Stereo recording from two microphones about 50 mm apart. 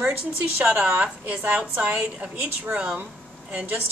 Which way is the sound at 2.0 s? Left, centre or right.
Right.